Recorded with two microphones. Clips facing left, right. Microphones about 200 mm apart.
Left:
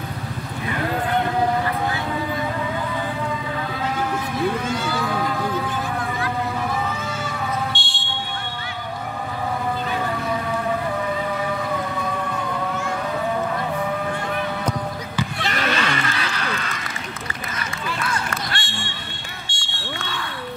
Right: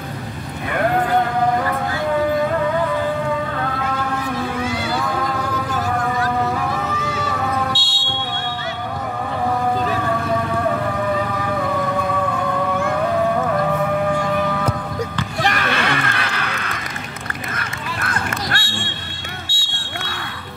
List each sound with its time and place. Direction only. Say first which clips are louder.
0.7 s clip-clop: right 6 dB; 60° right (ahead or behind)
7.7 s buzzer: right 4 dB; 5° right (ahead or behind)
15.5 s a sound: right 2 dB; 60° right (ahead or behind)
17.6 s duck: even; 55° right (ahead or behind)
19.4 s fire alarm: right 2 dB; 5° right (ahead or behind)